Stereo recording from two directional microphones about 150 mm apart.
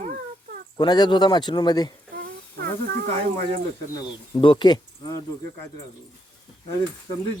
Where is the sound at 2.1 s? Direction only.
90° right.